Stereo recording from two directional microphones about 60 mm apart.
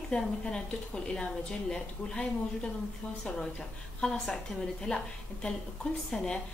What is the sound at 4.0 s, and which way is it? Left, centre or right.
A woman's voice, centre.